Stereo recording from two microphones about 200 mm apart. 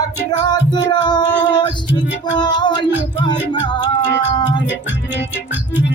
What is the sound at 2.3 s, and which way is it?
Music, 20° left (ahead or behind).